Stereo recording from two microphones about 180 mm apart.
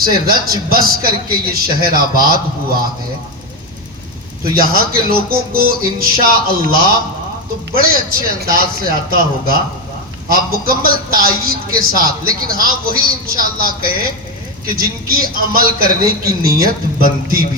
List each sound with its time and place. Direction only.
0.0 s a man's voice: 55° right (ahead or behind)
4.4 s a man's voice: 55° right (ahead or behind)